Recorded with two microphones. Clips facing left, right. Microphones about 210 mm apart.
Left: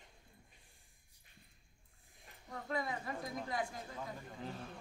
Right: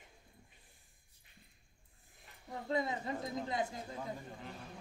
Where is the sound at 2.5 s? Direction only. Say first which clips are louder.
Right 4 dB; 20° right (ahead or behind).